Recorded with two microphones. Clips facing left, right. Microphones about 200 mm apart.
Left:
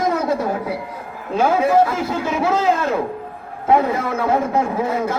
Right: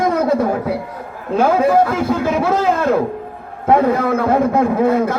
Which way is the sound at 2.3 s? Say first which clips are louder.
Left 1 dB; 55° right (ahead or behind).